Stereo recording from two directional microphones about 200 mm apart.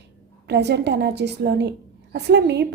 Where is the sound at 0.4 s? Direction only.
60° right (ahead or behind).